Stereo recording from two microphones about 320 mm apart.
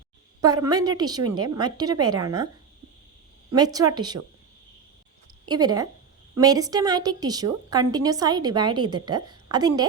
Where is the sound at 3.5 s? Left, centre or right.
Centre.